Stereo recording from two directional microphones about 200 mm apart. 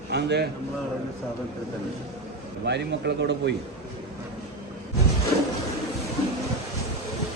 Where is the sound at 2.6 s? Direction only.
60° right (ahead or behind).